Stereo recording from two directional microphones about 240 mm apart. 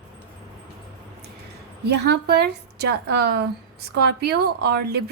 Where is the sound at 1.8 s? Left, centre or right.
Right.